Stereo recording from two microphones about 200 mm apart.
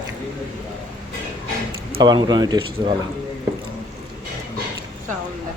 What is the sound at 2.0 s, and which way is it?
Speech, 20° right (ahead or behind).